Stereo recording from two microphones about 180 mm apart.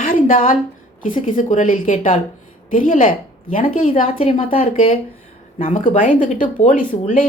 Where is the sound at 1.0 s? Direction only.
45° left (ahead or behind).